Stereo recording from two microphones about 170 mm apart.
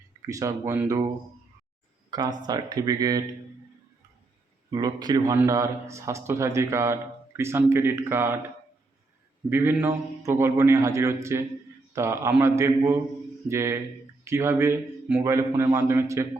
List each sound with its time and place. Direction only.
0.3 s speech: 20° right (ahead or behind)
2.0 s speech: 20° right (ahead or behind)
4.7 s a man's voice: 25° right (ahead or behind)
9.5 s a man's voice: 15° right (ahead or behind)